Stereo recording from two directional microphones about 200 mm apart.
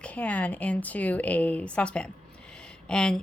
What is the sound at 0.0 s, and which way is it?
Speech, 5° left (ahead or behind).